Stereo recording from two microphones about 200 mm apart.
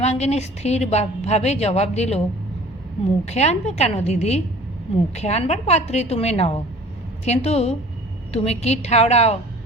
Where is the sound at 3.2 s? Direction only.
35° left (ahead or behind).